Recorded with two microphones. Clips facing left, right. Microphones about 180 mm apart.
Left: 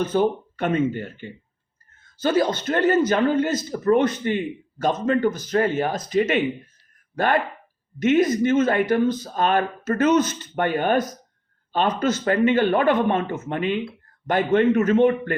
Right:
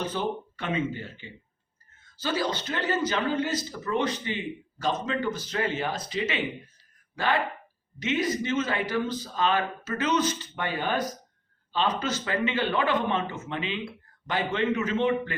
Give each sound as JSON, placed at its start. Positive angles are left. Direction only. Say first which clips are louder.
{"t": 0.0, "sound": "a man's voice", "louder": "left 9 dB", "side_deg": 45}